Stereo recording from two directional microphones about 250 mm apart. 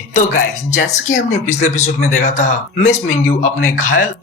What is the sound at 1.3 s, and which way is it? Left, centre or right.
A man's voice, left.